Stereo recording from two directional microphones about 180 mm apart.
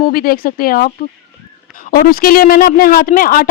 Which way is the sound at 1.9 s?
55° left (ahead or behind).